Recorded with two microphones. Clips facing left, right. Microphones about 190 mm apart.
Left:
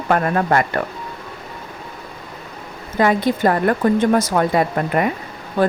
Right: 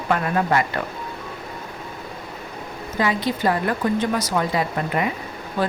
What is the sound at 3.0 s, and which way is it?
Speech, 50° left (ahead or behind).